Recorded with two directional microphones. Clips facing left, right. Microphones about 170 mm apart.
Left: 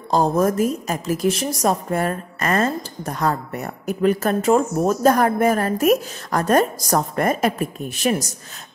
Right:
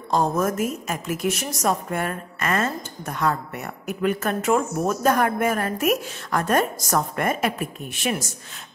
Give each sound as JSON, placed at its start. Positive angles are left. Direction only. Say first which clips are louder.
{"t": 0.1, "sound": "a woman's voice", "louder": "left 4 dB", "side_deg": 35}